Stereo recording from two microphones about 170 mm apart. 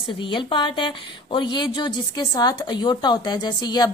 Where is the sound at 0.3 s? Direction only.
30° left (ahead or behind).